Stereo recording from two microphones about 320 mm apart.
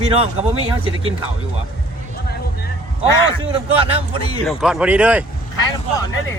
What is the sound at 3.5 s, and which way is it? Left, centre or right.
Speech, centre.